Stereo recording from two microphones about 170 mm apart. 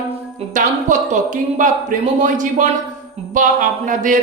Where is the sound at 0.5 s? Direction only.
45° right (ahead or behind).